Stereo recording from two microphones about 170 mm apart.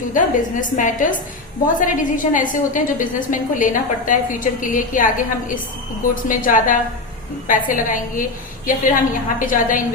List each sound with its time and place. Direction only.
0.1 s a woman's voice: 50° left (ahead or behind)